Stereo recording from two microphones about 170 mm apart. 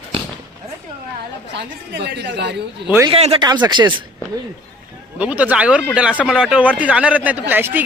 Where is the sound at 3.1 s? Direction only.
35° right (ahead or behind).